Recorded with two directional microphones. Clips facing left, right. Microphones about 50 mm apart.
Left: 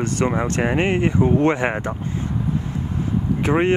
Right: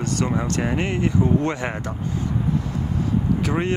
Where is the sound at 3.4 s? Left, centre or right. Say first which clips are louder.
Left 5 dB; left.